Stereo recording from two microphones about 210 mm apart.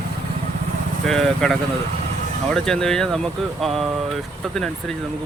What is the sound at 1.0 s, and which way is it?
Speech, centre (ahead or behind).